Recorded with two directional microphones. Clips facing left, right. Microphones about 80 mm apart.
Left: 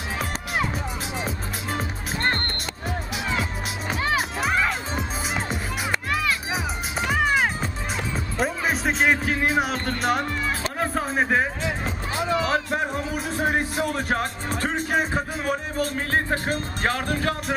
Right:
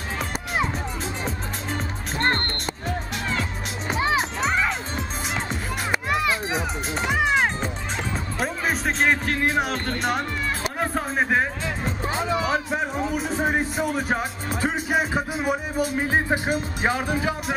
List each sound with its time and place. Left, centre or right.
1.2 s music: centre
2.1 s music: right
2.9 s music: centre
5.9 s music: centre
6.5 s music: centre
12.4 s speech: centre